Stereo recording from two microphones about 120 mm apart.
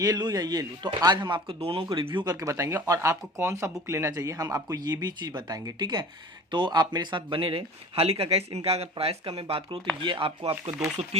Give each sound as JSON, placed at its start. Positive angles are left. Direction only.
{"t": 0.0, "sound": "speech", "side_deg": -35}